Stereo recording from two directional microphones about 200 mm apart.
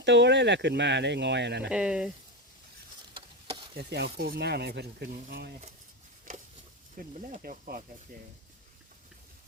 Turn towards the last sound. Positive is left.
turn(degrees=-45)  # may be behind; listen again after turning